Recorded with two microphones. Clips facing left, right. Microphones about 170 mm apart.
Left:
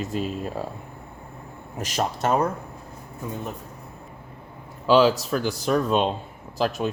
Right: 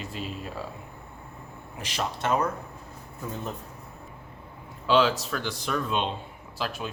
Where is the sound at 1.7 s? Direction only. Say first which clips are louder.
Left 5 dB; 45° left (ahead or behind).